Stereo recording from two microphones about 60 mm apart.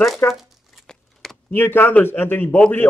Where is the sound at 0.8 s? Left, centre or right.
Centre.